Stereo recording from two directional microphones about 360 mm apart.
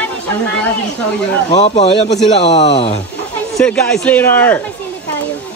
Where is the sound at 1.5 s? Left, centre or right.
Centre.